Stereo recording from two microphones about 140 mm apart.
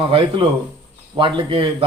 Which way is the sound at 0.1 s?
35° right (ahead or behind).